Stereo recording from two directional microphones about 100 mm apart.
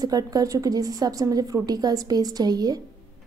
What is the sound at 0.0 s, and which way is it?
A woman's voice, 40° right (ahead or behind).